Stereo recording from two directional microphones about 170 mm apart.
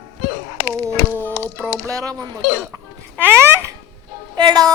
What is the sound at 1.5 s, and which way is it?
Music, 5° left (ahead or behind).